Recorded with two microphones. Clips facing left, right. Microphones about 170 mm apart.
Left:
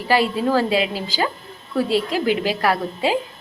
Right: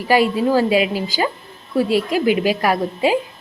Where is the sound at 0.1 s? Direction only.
15° right (ahead or behind).